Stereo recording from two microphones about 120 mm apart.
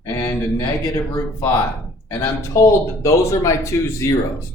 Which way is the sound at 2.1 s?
25° left (ahead or behind).